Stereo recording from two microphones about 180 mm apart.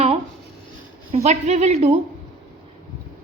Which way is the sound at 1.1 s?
40° right (ahead or behind).